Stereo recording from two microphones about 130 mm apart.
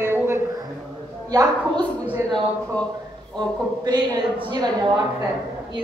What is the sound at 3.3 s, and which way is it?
A man's voice, 30° right (ahead or behind).